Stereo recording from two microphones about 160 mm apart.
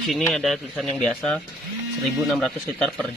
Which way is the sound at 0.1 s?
Centre (ahead or behind).